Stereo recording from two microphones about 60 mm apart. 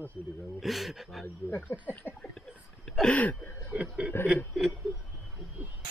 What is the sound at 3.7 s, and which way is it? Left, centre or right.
Chuckle, centre.